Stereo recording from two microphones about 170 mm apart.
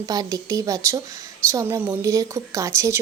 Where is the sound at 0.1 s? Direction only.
20° right (ahead or behind).